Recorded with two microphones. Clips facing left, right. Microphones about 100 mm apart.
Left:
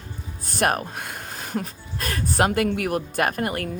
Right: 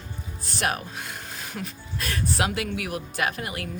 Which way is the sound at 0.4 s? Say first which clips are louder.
Left 5 dB; 50° left (ahead or behind).